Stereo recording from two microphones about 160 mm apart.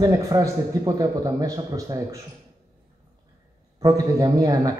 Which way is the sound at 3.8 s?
20° right (ahead or behind).